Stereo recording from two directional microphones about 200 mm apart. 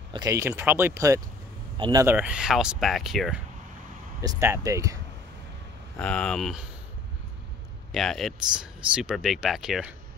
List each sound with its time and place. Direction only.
0.1 s speech: 15° right (ahead or behind); by 3.3 s centre (ahead or behind)
4.2 s speech: 15° right (ahead or behind)
5.9 s speech: 5° left (ahead or behind)
7.9 s speech: centre (ahead or behind)